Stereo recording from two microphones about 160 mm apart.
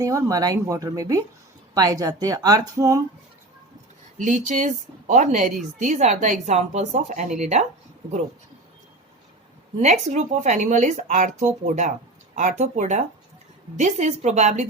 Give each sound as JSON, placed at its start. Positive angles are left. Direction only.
{"t": 0.0, "sound": "speech", "side_deg": -20}
{"t": 4.2, "sound": "speech", "side_deg": -50}
{"t": 9.8, "sound": "speech", "side_deg": -45}